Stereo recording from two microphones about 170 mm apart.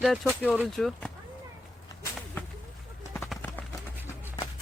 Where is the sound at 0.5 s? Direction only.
Centre (ahead or behind).